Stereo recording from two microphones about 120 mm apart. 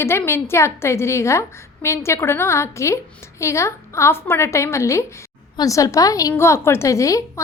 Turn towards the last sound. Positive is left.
turn(degrees=25)  # may be behind; listen again after turning